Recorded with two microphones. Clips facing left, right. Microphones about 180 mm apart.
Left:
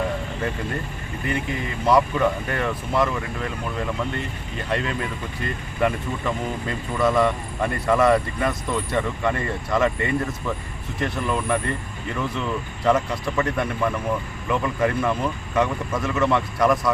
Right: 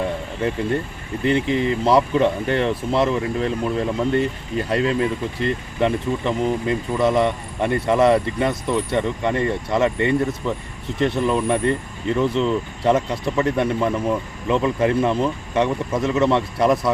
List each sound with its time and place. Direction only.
1.2 s speech: 25° right (ahead or behind)